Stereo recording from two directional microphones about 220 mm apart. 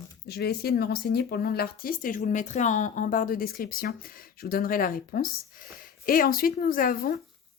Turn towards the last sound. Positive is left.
turn(degrees=40)  # may be behind; listen again after turning